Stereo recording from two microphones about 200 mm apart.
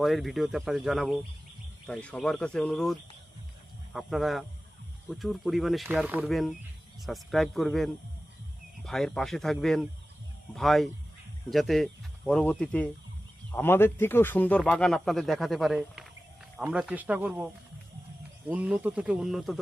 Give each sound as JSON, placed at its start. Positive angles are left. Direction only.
{"t": 0.0, "sound": "speech", "side_deg": 0}